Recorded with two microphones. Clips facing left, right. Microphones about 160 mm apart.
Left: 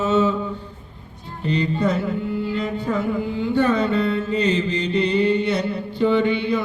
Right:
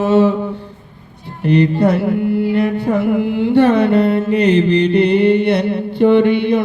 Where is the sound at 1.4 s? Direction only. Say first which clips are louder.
Right 8 dB; 65° right (ahead or behind).